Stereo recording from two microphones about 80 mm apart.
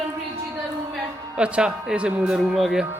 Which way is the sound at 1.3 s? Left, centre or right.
Centre.